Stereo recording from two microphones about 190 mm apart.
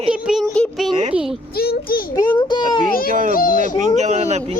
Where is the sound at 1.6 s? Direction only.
55° left (ahead or behind).